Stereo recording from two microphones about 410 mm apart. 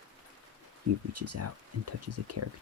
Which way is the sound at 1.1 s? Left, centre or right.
Right.